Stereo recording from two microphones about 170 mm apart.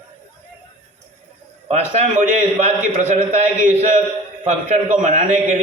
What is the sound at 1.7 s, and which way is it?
A man's voice, 40° right (ahead or behind).